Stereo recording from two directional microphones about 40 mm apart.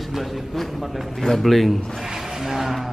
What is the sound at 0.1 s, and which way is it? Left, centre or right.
A man's voice, centre.